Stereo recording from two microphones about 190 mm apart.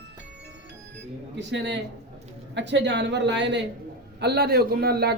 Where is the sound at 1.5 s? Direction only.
70° right (ahead or behind).